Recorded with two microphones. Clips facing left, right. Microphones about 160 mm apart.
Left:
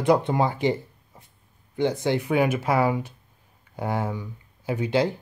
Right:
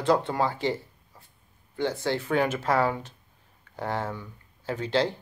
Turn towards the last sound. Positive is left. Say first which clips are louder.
# left 3 dB
turn(degrees=10)  # may be behind; listen again after turning